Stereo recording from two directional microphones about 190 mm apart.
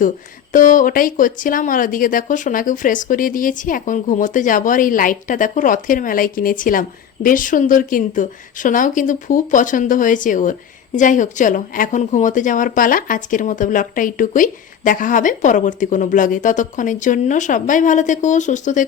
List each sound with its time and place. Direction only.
0.5 s speech: 45° left (ahead or behind)